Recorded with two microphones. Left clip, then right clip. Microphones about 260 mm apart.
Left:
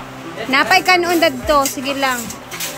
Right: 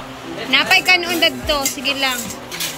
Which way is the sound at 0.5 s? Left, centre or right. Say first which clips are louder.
Left 1 dB; centre.